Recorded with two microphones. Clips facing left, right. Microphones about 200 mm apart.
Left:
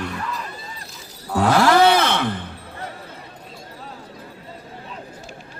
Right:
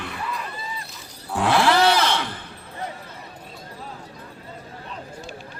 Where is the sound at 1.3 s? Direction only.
40° left (ahead or behind).